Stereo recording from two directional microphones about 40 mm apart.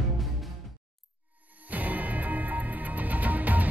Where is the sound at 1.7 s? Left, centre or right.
Right.